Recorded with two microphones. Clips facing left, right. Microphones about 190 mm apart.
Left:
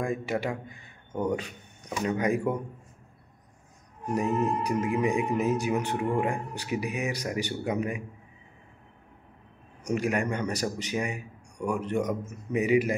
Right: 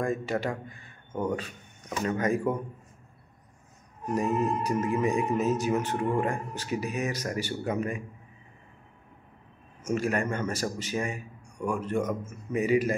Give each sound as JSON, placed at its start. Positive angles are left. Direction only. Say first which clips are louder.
{"t": 0.0, "sound": "speech", "louder": "right 1 dB", "side_deg": 15}
{"t": 4.1, "sound": "speech", "louder": "even", "side_deg": 15}
{"t": 9.8, "sound": "speech", "louder": "even", "side_deg": 15}